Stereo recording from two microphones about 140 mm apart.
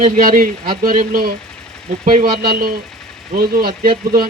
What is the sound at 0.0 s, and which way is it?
Speech, 75° right (ahead or behind).